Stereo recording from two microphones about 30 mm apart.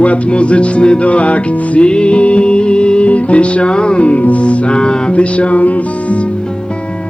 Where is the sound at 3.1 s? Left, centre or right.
Left.